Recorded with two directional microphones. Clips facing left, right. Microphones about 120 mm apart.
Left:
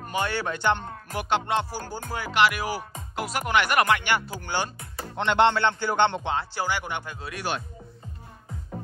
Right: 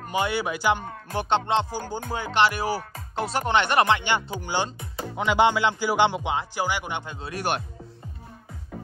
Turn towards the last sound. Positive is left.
turn(degrees=-20)  # may be behind; listen again after turning